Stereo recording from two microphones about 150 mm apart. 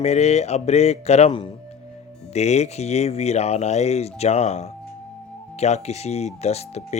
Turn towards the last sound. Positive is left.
turn(degrees=45)  # may be behind; listen again after turning